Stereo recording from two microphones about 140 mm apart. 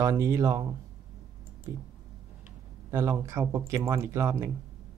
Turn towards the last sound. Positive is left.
turn(degrees=-20)  # may be behind; listen again after turning